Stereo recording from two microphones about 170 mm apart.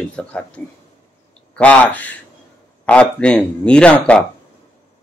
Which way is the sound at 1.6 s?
10° left (ahead or behind).